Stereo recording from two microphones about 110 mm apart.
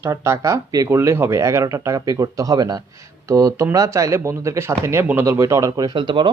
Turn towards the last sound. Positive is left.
turn(degrees=-45)  # may be behind; listen again after turning